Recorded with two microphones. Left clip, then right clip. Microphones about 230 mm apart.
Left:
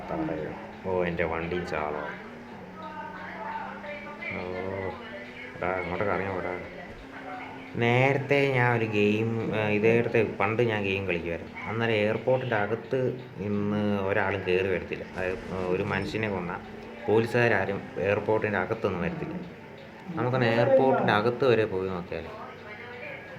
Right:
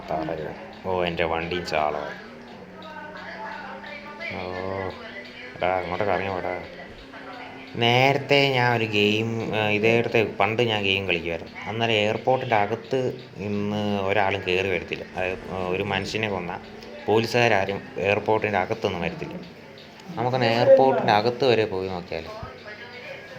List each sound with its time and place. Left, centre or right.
0.1 s speech: right
5.5 s speech: right
7.8 s mantra: centre
20.1 s mantra: centre